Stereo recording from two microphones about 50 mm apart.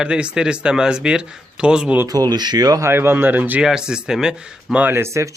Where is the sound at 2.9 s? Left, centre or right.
Right.